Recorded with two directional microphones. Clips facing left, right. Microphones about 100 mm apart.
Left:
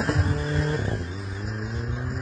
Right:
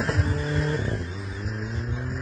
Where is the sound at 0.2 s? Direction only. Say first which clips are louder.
Even; 35° left (ahead or behind).